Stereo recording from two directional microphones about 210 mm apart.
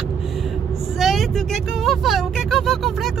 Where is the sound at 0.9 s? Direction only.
Centre (ahead or behind).